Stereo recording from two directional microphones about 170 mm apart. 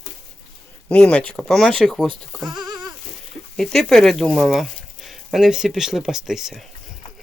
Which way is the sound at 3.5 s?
5° left (ahead or behind).